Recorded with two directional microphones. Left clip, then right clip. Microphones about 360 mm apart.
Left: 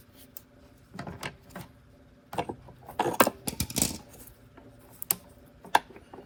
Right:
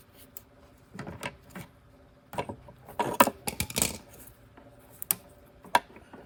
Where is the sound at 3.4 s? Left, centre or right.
Centre.